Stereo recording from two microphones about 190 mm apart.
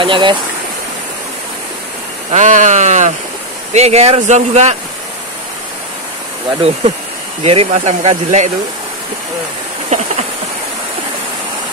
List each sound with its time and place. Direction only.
0.0 s speech: 25° right (ahead or behind)
2.3 s speech: 40° right (ahead or behind)
7.4 s speech: 35° right (ahead or behind)
9.9 s a sound: 40° right (ahead or behind)